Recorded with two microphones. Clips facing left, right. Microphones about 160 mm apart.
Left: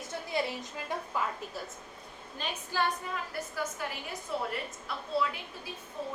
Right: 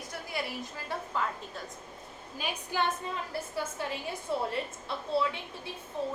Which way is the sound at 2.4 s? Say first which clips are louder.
Right 1 dB; 15° right (ahead or behind).